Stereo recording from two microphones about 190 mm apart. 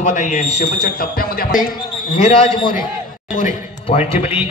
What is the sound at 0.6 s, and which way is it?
Speech, 55° left (ahead or behind).